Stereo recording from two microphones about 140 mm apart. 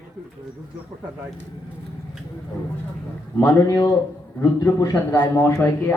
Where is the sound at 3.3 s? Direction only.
20° left (ahead or behind).